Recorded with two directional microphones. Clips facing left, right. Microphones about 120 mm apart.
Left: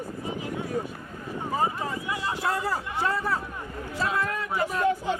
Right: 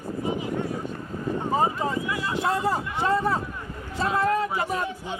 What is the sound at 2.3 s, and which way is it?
Speech, 20° right (ahead or behind).